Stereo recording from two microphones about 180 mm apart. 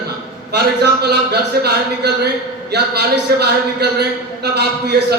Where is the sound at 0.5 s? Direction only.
65° right (ahead or behind).